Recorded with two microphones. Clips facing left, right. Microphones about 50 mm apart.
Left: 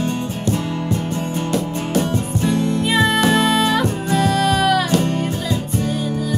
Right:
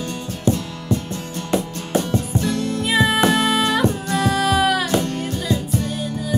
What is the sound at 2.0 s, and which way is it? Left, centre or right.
Music, left.